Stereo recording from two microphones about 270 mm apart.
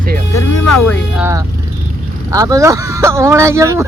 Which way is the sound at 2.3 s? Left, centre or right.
Centre.